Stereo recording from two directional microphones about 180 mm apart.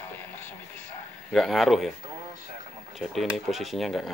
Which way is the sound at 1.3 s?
Centre (ahead or behind).